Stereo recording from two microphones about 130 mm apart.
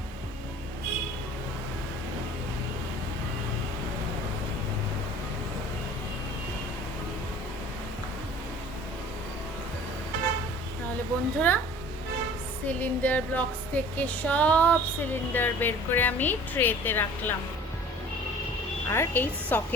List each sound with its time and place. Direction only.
11.3 s speech: 15° left (ahead or behind)
12.6 s speech: 15° left (ahead or behind)
18.9 s speech: 15° left (ahead or behind)